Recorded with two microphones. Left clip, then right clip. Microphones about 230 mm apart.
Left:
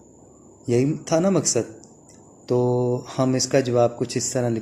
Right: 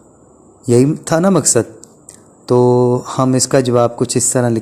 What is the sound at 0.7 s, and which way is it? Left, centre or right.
A man's voice, right.